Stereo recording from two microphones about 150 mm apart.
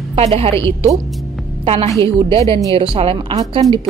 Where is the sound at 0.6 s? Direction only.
20° left (ahead or behind).